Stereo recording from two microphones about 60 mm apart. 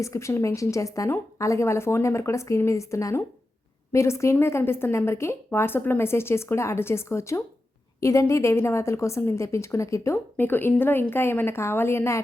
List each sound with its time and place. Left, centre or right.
0.0 s a woman's voice: left
5.5 s a woman's voice: left
10.3 s a woman's voice: left